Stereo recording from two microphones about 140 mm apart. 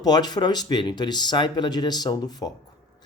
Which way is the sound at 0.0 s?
30° left (ahead or behind).